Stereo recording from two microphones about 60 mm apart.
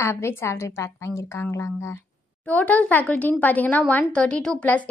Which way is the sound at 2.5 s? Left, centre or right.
Left.